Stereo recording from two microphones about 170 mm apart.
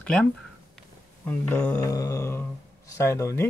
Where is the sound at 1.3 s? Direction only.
10° left (ahead or behind).